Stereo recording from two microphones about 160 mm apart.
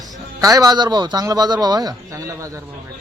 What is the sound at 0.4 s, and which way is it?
A man's voice, 20° right (ahead or behind).